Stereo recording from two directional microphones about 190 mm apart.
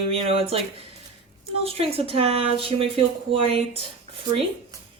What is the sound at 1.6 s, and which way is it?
Speech, 30° right (ahead or behind).